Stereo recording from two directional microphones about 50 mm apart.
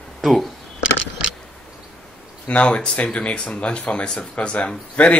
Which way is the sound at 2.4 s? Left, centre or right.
Left.